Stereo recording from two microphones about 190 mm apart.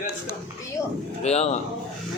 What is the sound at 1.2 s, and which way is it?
Speech, 35° left (ahead or behind).